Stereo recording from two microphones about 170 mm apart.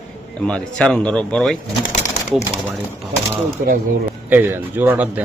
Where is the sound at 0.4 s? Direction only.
5° left (ahead or behind).